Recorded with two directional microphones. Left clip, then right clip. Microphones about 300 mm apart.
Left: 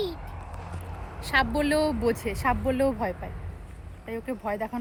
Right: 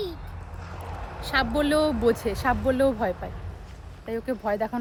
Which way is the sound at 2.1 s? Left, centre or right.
Right.